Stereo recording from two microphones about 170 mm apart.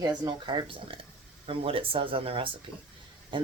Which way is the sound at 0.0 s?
30° right (ahead or behind).